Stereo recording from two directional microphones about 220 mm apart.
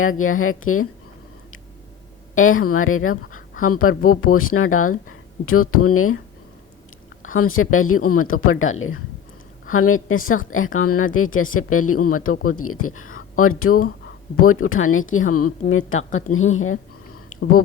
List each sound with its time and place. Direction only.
0.0 s speech: 70° left (ahead or behind)
2.3 s speech: 70° left (ahead or behind)
7.3 s speech: 70° left (ahead or behind); by 15.5 s 90° left
15.7 s speech: 70° left (ahead or behind)